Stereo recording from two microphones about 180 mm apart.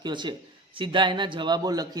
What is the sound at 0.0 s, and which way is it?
A man's voice, 25° right (ahead or behind).